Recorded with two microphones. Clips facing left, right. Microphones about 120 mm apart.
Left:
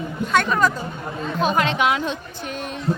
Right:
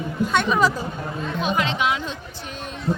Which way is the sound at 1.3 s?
45° left (ahead or behind).